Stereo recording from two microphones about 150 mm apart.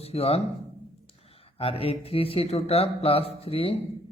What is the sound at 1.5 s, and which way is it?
Speech, 40° left (ahead or behind).